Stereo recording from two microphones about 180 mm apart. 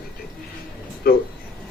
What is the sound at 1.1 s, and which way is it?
Speech, 55° left (ahead or behind).